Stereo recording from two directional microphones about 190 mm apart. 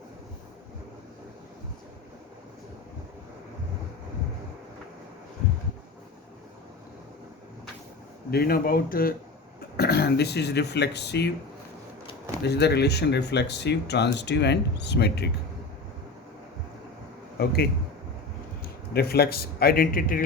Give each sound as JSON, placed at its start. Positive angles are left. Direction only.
{"t": 8.3, "sound": "speech", "side_deg": 55}
{"t": 12.4, "sound": "speech", "side_deg": 60}
{"t": 17.4, "sound": "speech", "side_deg": 55}
{"t": 18.6, "sound": "speech", "side_deg": 55}